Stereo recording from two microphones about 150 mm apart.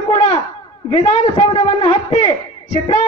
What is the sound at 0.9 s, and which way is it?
A man's voice, 40° left (ahead or behind).